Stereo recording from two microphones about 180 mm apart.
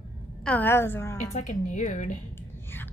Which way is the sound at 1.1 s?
40° left (ahead or behind).